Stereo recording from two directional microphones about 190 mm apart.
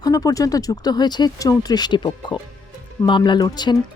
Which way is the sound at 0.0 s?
20° left (ahead or behind).